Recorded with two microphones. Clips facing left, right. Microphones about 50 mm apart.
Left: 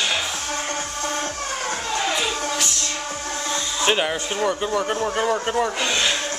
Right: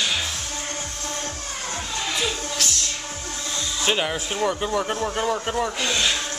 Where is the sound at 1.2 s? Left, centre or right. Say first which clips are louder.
Left 5 dB; left.